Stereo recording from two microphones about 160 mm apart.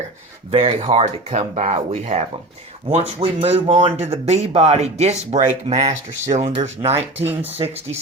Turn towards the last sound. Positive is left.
turn(degrees=-40)  # may be behind; listen again after turning